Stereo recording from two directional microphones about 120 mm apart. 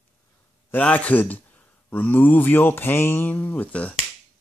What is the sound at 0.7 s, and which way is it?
A man's voice, 10° left (ahead or behind).